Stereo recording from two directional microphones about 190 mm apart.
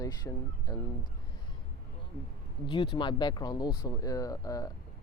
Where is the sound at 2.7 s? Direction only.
25° left (ahead or behind).